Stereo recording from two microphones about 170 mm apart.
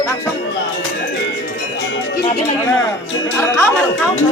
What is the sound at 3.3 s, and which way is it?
Speech, 15° left (ahead or behind).